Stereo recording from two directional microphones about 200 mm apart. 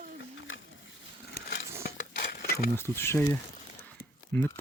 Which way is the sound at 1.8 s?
50° left (ahead or behind).